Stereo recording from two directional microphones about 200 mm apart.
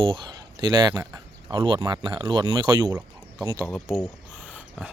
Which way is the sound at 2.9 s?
10° right (ahead or behind).